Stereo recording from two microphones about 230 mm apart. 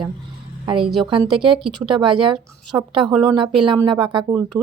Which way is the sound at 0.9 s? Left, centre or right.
Centre.